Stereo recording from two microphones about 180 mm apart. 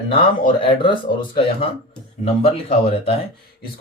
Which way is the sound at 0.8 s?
25° left (ahead or behind).